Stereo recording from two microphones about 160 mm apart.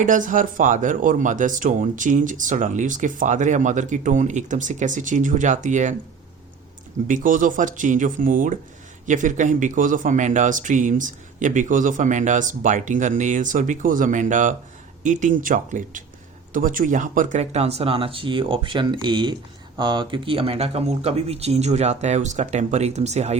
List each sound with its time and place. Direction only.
0.0 s speech: 55° right (ahead or behind)
7.1 s speech: 55° right (ahead or behind)